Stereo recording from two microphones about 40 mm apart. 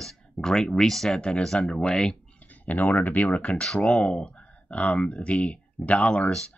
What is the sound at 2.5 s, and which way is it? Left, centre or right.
Speech, left.